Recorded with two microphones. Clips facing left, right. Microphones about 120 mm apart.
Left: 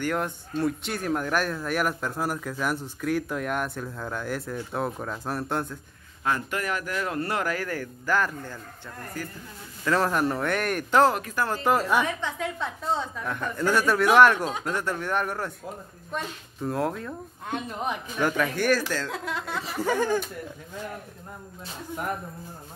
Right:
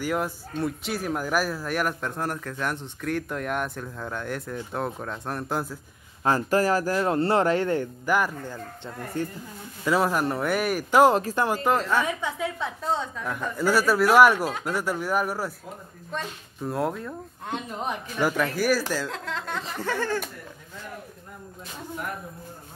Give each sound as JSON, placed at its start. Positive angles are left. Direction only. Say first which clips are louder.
{"t": 0.0, "sound": "speech", "louder": "right 1 dB", "side_deg": -5}
{"t": 6.2, "sound": "speech", "louder": "right 6 dB", "side_deg": -35}
{"t": 9.1, "sound": "speech", "louder": "right 7 dB", "side_deg": -25}
{"t": 9.8, "sound": "speech", "louder": "right 1 dB", "side_deg": -5}
{"t": 11.1, "sound": "speech", "louder": "right 4 dB", "side_deg": -25}
{"t": 11.6, "sound": "speech", "louder": "left 4 dB", "side_deg": 10}
{"t": 12.2, "sound": "speech", "louder": "right 1 dB", "side_deg": -5}
{"t": 19.0, "sound": "speech", "louder": "even", "side_deg": 10}